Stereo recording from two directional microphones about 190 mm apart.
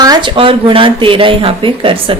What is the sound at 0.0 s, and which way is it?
A woman's voice, 25° right (ahead or behind).